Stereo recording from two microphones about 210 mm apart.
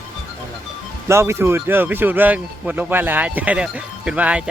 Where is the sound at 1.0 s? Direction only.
15° right (ahead or behind).